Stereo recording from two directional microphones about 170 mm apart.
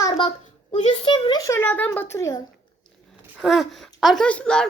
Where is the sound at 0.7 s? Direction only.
35° left (ahead or behind).